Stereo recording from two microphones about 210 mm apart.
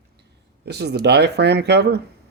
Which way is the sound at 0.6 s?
55° right (ahead or behind).